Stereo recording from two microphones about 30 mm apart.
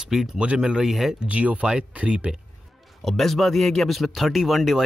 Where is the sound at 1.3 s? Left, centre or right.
Right.